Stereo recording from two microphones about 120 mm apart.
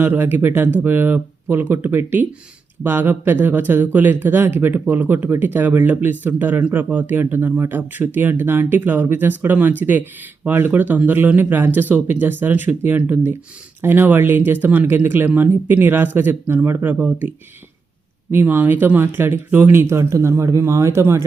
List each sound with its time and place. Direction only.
0.0 s speech: 15° right (ahead or behind)